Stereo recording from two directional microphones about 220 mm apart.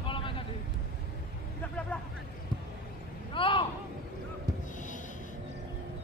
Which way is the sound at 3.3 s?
25° left (ahead or behind).